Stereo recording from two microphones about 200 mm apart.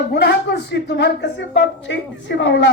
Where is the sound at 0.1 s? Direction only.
55° left (ahead or behind).